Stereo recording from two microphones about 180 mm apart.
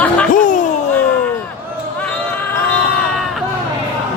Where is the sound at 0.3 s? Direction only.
45° left (ahead or behind).